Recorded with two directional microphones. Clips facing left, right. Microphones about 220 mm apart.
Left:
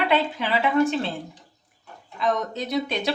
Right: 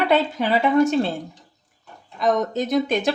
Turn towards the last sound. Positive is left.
turn(degrees=-45)  # may be behind; listen again after turning